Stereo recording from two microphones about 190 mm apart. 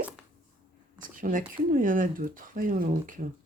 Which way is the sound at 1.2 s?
45° right (ahead or behind).